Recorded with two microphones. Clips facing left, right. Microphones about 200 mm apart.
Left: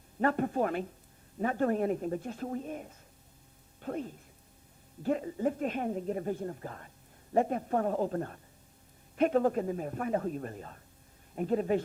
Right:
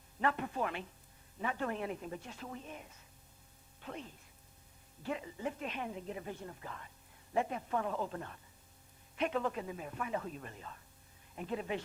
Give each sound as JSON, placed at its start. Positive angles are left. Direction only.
{"t": 0.2, "sound": "a woman's voice", "side_deg": 45}